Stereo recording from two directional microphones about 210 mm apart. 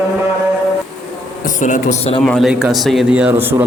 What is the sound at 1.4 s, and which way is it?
Speech, 35° left (ahead or behind).